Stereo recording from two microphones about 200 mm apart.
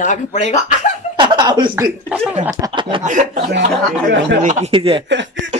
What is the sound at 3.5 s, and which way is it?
Speech, 60° right (ahead or behind).